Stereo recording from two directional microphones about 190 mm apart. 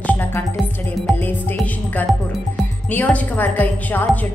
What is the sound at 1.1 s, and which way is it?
A woman's voice, 5° left (ahead or behind).